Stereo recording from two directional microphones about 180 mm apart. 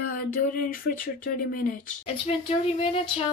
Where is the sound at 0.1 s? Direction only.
50° left (ahead or behind).